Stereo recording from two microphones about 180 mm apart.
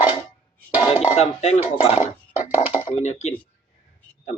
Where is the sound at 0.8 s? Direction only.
35° left (ahead or behind).